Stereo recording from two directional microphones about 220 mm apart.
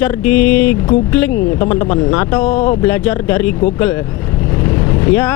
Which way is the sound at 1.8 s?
15° left (ahead or behind).